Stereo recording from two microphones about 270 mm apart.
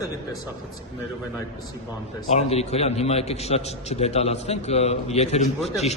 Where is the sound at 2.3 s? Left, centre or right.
Left.